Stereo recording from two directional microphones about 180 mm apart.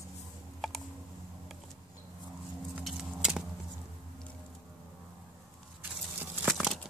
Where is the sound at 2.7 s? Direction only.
5° right (ahead or behind).